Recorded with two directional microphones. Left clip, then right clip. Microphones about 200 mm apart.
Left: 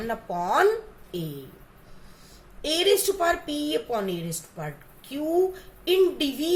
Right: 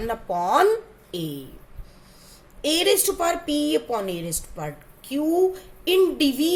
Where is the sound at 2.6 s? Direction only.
35° right (ahead or behind).